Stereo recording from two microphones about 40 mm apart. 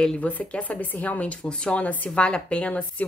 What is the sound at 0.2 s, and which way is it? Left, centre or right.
A woman's voice, left.